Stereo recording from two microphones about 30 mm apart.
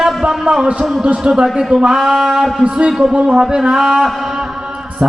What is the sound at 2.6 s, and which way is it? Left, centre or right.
Speech, right.